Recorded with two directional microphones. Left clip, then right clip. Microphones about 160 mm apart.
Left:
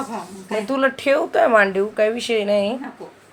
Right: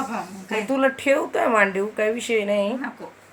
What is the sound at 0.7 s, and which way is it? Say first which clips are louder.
Speech: left 2 dB; 15° left (ahead or behind).